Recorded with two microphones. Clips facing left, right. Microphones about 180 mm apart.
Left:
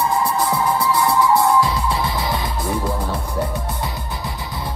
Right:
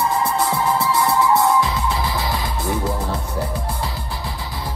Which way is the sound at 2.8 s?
30° right (ahead or behind).